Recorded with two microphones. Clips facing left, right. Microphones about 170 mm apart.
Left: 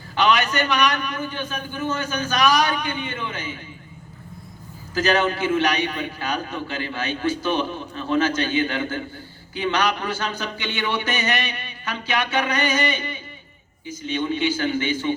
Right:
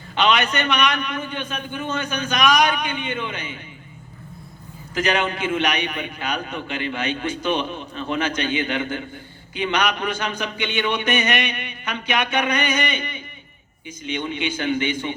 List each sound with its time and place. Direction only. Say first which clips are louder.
0.2 s a man's voice: even; 20° right (ahead or behind)
4.9 s a man's voice: left 2 dB; 20° right (ahead or behind)